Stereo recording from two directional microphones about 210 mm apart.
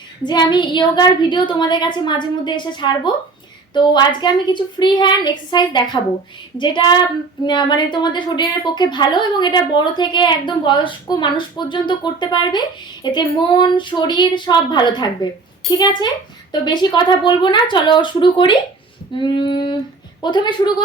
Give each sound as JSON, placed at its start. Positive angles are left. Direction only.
{"t": 0.2, "sound": "a woman's voice", "side_deg": 20}